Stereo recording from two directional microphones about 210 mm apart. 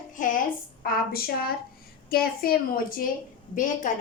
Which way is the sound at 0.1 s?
40° left (ahead or behind).